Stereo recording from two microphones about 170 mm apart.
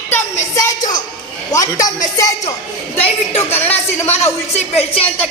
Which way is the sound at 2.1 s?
20° left (ahead or behind).